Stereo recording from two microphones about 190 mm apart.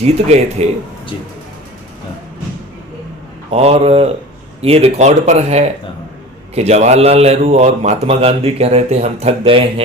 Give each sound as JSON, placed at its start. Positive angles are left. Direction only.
{"t": 0.0, "sound": "a man's voice", "side_deg": -35}
{"t": 3.5, "sound": "a man's voice", "side_deg": -35}